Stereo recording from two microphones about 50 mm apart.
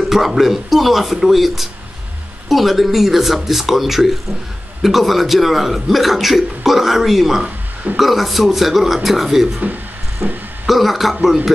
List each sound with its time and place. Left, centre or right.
0.1 s speech: centre
7.4 s a sound: right
8.0 s speech: centre
10.2 s speech: right
10.7 s speech: centre